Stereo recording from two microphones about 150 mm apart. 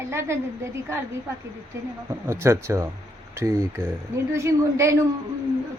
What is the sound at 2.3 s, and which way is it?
A woman's voice, 20° right (ahead or behind).